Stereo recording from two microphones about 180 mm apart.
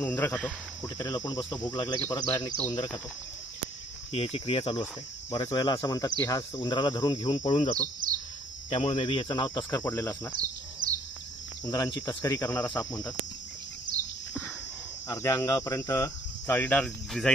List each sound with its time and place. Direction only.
0.0 s cricket: 10° left (ahead or behind)
4.1 s cricket: 30° left (ahead or behind)
7.4 s speech: 35° left (ahead or behind)
8.7 s cricket: 30° left (ahead or behind); by 10.3 s 15° left (ahead or behind)
11.6 s cricket: 20° left (ahead or behind)
15.0 s cricket: 15° left (ahead or behind)